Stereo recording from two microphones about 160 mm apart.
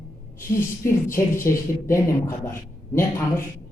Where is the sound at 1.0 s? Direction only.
15° left (ahead or behind).